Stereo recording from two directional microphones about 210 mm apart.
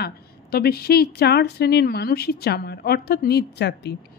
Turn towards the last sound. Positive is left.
turn(degrees=50)  # may be behind; listen again after turning